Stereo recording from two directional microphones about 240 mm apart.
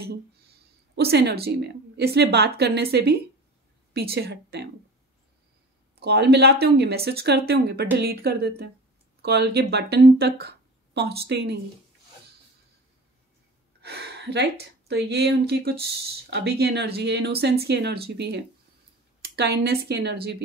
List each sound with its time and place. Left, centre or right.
0.9 s a woman's voice: right
5.9 s speech: right
13.7 s a woman's voice: right